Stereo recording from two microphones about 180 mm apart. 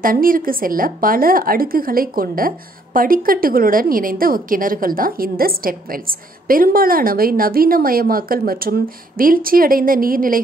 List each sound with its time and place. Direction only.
0.0 s a woman's voice: 50° right (ahead or behind)